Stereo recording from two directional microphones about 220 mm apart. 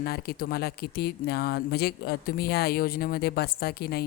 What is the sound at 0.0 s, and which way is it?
A woman's voice, 45° left (ahead or behind).